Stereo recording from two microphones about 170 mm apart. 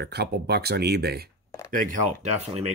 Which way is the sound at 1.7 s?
50° right (ahead or behind).